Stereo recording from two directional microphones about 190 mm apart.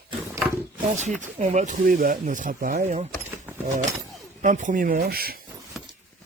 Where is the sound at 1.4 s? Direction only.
40° right (ahead or behind).